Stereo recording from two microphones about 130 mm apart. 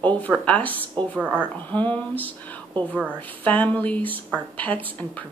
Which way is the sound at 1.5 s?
10° left (ahead or behind).